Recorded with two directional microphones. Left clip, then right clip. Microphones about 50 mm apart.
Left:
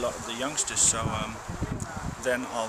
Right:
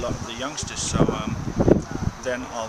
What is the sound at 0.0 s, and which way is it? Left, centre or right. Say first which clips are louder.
Speech: right 1 dB; centre.